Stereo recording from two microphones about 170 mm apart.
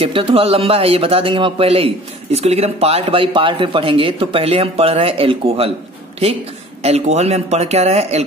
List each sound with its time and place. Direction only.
0.0 s speech: 30° right (ahead or behind)
6.8 s speech: 40° right (ahead or behind)